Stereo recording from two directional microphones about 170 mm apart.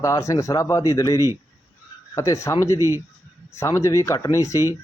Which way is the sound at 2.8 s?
15° right (ahead or behind).